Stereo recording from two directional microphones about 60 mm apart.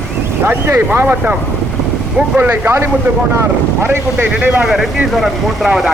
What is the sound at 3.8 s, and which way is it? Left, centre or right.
Speech, right.